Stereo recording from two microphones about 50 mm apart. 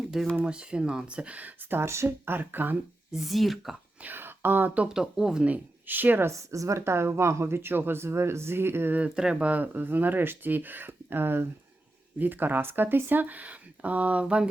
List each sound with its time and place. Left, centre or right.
0.4 s speech: centre
1.7 s speech: right
2.0 s speech: right
3.1 s speech: centre
4.0 s speech: right
4.9 s speech: centre
5.8 s speech: right
6.2 s speech: right
8.0 s speech: right
9.1 s speech: centre
9.5 s speech: right